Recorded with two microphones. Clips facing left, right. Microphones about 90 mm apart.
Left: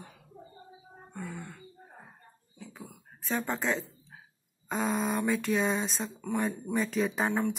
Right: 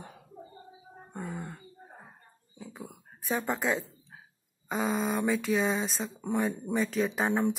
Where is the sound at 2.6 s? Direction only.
20° right (ahead or behind).